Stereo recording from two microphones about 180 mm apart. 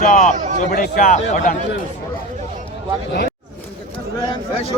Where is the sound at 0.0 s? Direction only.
50° left (ahead or behind).